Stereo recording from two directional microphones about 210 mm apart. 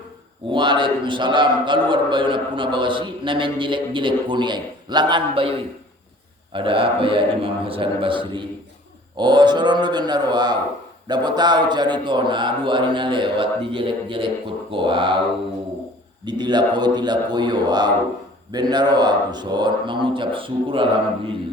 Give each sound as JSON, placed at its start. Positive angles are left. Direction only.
{"t": 0.5, "sound": "speech", "side_deg": -20}
{"t": 16.2, "sound": "speech", "side_deg": -20}